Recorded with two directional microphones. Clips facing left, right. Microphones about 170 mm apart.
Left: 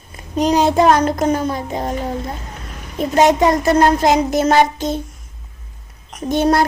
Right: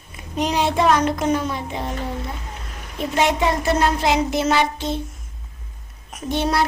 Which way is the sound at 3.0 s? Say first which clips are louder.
Left 7 dB; 45° left (ahead or behind).